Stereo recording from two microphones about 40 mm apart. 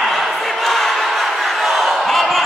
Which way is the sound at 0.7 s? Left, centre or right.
Centre.